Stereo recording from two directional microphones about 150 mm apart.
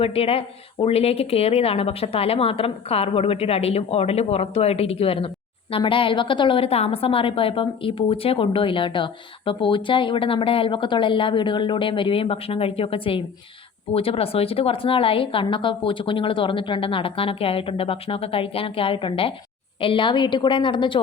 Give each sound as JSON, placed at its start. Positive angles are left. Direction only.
{"t": 0.0, "sound": "a woman's voice", "side_deg": 40}